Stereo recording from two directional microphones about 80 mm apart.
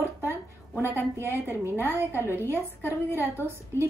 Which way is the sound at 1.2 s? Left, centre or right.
Right.